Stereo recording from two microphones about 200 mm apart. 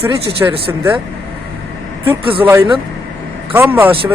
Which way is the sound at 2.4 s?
10° right (ahead or behind).